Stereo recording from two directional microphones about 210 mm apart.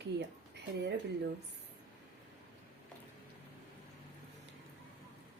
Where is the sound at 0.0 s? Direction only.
55° right (ahead or behind).